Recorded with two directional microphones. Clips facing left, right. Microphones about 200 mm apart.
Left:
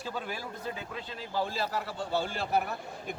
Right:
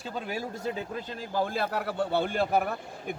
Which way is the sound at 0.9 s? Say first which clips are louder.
Right 3 dB; 45° right (ahead or behind).